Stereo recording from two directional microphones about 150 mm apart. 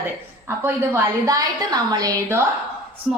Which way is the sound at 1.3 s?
25° right (ahead or behind).